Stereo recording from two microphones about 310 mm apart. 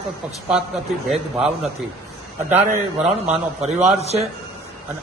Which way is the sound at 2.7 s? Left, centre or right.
Right.